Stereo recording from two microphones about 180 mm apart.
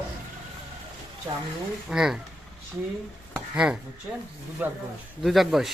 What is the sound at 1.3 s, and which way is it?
Speech, 20° right (ahead or behind).